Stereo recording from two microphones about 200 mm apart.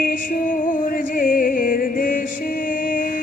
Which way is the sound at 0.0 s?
45° left (ahead or behind).